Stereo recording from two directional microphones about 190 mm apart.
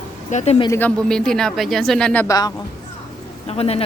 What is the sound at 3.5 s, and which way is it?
Speech, 30° left (ahead or behind).